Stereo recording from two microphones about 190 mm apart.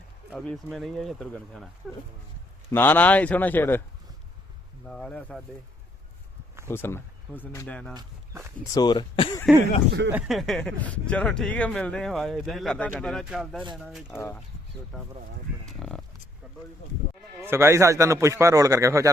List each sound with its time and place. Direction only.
0.3 s speech: centre (ahead or behind)
2.7 s speech: 10° left (ahead or behind)
4.9 s speech: 5° left (ahead or behind)
6.7 s speech: 10° left (ahead or behind)
7.9 s speech: 15° right (ahead or behind)
8.7 s speech: 20° left (ahead or behind)
10.1 s speech: 5° right (ahead or behind)
14.2 s speech: 15° left (ahead or behind)
14.9 s speech: 5° left (ahead or behind)
17.4 s speech: 15° right (ahead or behind)